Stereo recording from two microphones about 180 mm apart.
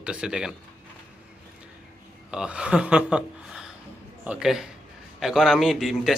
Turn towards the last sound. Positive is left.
turn(degrees=0)  # may be behind; listen again after turning